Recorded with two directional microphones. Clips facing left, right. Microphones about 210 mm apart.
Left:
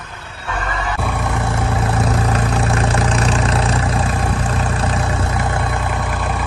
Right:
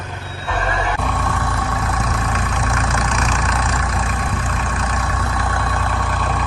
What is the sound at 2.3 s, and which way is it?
Vehicle, 35° left (ahead or behind).